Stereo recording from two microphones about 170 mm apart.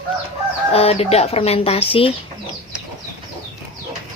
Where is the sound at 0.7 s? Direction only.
35° left (ahead or behind).